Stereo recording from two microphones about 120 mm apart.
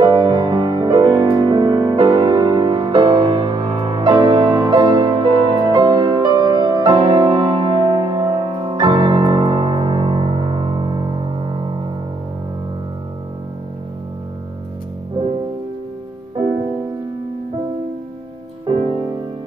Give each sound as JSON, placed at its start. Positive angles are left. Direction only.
{"t": 0.0, "sound": "music", "side_deg": -40}
{"t": 2.7, "sound": "music", "side_deg": -45}
{"t": 15.2, "sound": "music", "side_deg": -45}
{"t": 18.7, "sound": "music", "side_deg": -45}